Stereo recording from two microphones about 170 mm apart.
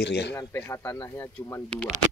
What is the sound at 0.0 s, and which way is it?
Speech, 75° left (ahead or behind).